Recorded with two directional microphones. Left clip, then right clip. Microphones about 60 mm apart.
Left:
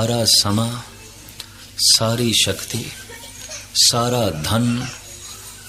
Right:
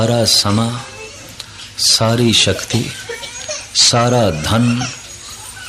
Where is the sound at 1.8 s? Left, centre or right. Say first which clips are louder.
Right 3 dB; left.